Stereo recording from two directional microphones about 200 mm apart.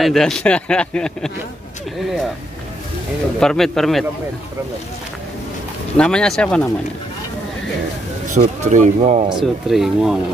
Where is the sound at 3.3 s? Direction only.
Centre (ahead or behind).